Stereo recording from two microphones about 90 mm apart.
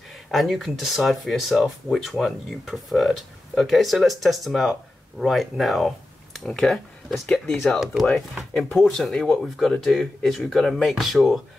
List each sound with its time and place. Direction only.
0.3 s speech: centre (ahead or behind)